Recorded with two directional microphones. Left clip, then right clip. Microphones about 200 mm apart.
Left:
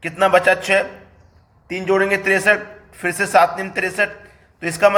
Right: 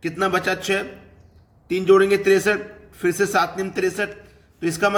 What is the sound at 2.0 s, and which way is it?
A man's voice, 15° right (ahead or behind).